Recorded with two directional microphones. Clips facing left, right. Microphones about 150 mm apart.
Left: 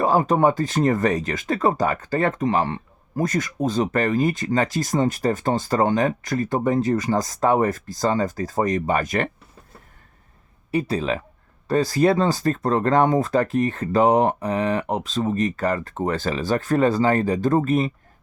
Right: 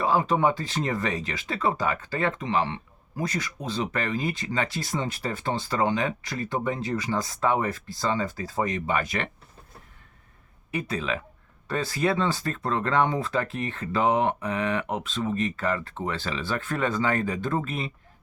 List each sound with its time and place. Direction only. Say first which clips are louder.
0.0 s speech: left 5 dB; 45° left (ahead or behind)
10.7 s speech: left 7 dB; 35° left (ahead or behind)